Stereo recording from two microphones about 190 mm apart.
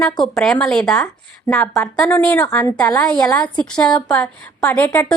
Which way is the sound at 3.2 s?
15° left (ahead or behind).